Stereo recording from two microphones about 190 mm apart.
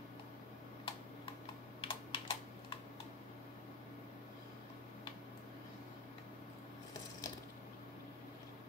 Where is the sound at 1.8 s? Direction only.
30° left (ahead or behind).